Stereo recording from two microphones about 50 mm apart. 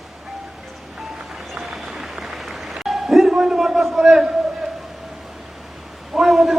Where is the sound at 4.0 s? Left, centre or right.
Centre.